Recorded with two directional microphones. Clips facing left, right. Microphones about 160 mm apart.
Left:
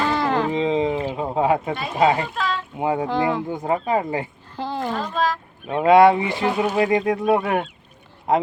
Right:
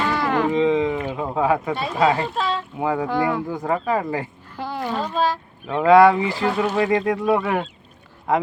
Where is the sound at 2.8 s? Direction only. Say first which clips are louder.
Left 1 dB; 20° left (ahead or behind).